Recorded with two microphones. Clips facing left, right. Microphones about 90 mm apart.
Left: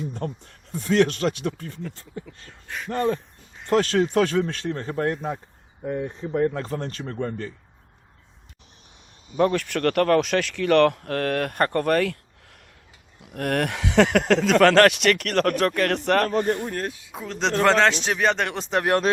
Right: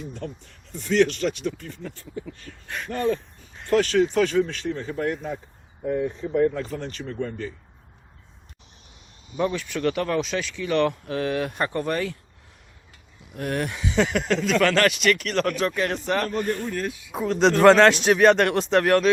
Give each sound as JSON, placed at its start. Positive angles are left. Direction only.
{"t": 0.2, "sound": "speech", "side_deg": 45}
{"t": 2.6, "sound": "speech", "side_deg": 0}
{"t": 2.9, "sound": "speech", "side_deg": 35}
{"t": 3.8, "sound": "speech", "side_deg": 45}
{"t": 6.3, "sound": "speech", "side_deg": 45}
{"t": 9.4, "sound": "speech", "side_deg": 60}
{"t": 13.1, "sound": "speech", "side_deg": 65}
{"t": 16.6, "sound": "speech", "side_deg": 45}
{"t": 17.6, "sound": "speech", "side_deg": -5}
{"t": 18.8, "sound": "speech", "side_deg": 20}